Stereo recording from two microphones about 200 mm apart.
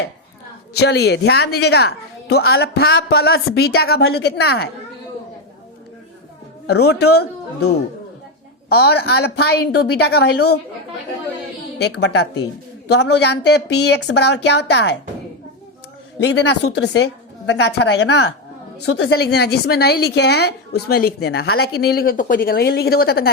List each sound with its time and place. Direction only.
0.7 s a woman's voice: 55° left (ahead or behind)
6.7 s a woman's voice: 55° left (ahead or behind)
8.7 s a woman's voice: 55° left (ahead or behind)
11.9 s a woman's voice: 55° left (ahead or behind)
16.2 s a woman's voice: 60° left (ahead or behind)